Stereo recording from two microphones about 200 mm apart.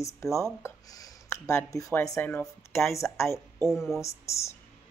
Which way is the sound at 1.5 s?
15° left (ahead or behind).